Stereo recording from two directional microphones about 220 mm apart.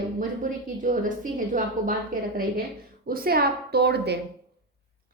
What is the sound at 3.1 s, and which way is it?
A woman's voice, 40° right (ahead or behind).